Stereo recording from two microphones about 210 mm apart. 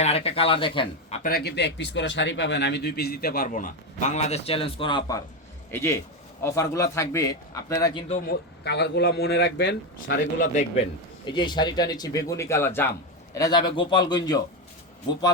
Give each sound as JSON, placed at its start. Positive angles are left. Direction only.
{"t": 0.0, "sound": "speech", "side_deg": 30}
{"t": 1.2, "sound": "speech", "side_deg": 50}
{"t": 8.3, "sound": "speech", "side_deg": 50}
{"t": 10.4, "sound": "a man's voice", "side_deg": 35}
{"t": 11.3, "sound": "speech", "side_deg": 20}